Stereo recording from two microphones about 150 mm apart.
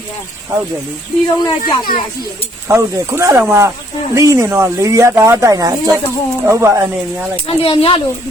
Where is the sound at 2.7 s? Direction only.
15° right (ahead or behind).